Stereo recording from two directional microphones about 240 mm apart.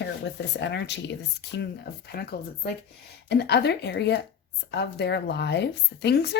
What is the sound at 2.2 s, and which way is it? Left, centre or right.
Speech, left.